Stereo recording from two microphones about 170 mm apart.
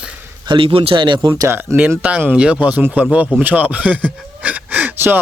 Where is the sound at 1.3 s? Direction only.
15° right (ahead or behind).